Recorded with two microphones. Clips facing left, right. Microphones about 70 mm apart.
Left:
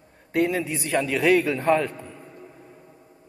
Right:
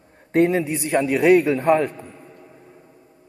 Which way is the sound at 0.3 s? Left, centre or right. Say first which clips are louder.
Right 5 dB; right.